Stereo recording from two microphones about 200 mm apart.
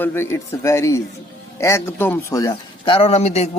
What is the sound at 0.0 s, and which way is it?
Speech, 10° left (ahead or behind).